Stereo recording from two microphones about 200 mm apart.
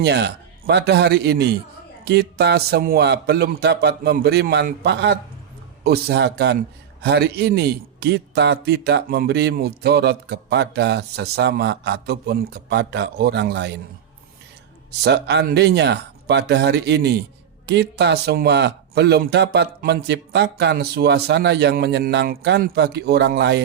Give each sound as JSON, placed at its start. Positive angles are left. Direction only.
{"t": 0.0, "sound": "a man's voice", "side_deg": -55}
{"t": 15.0, "sound": "a man's voice", "side_deg": -55}